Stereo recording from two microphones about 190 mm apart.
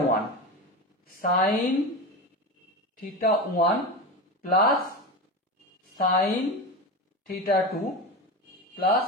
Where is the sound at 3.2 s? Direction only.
50° left (ahead or behind).